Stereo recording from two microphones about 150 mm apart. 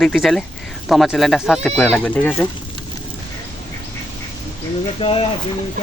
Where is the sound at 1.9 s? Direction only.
10° left (ahead or behind).